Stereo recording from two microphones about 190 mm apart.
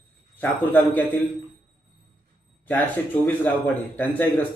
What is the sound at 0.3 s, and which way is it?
Speech, 10° left (ahead or behind).